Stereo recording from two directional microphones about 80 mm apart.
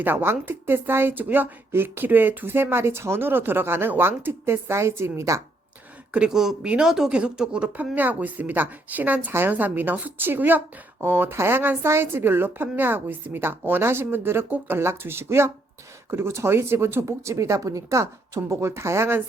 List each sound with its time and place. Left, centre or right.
0.0 s speech: right
6.1 s speech: centre; by 19.2 s right